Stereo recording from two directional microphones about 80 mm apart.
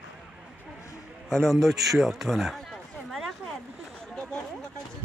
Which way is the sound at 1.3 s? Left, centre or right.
Centre.